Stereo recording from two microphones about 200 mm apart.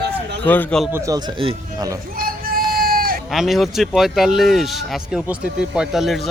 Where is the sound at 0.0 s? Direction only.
60° right (ahead or behind).